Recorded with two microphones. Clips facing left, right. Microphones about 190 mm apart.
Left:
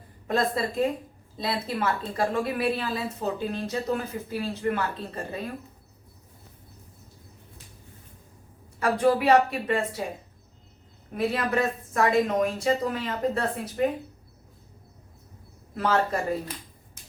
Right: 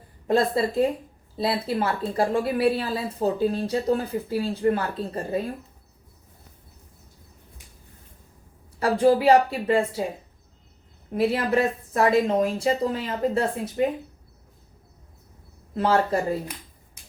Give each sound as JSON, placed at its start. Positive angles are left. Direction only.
{"t": 0.3, "sound": "a woman's voice", "side_deg": -30}
{"t": 8.8, "sound": "a woman's voice", "side_deg": -30}
{"t": 11.1, "sound": "speech", "side_deg": -25}
{"t": 15.7, "sound": "a man's voice", "side_deg": -30}